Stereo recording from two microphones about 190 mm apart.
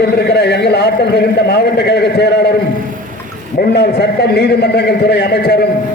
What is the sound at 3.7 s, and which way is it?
A man's voice, 60° left (ahead or behind).